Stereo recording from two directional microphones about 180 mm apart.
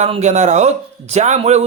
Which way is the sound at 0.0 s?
40° right (ahead or behind).